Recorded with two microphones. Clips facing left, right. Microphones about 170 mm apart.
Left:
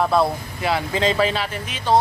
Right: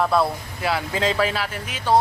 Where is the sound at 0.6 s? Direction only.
5° right (ahead or behind).